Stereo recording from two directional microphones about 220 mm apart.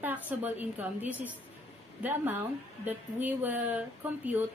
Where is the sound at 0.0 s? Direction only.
5° right (ahead or behind).